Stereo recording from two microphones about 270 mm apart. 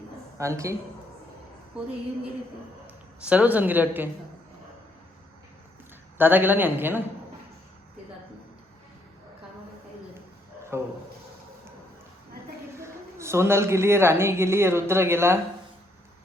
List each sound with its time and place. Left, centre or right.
0.3 s a man's voice: centre
3.2 s a woman's voice: centre
6.1 s a woman's voice: centre
10.7 s a woman's voice: centre
12.8 s speech: centre